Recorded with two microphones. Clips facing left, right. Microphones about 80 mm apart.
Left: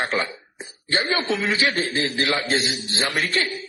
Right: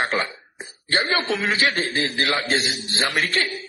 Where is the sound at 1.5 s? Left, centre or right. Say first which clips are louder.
Even; right.